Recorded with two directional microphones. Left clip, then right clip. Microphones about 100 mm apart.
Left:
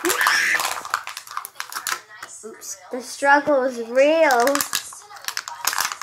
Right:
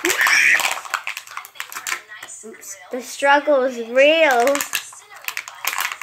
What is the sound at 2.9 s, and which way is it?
Speech, centre (ahead or behind).